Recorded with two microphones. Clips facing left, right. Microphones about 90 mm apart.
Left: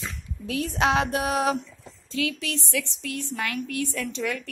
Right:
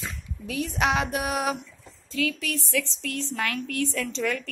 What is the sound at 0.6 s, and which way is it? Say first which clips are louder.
Music: left 2 dB; 35° left (ahead or behind).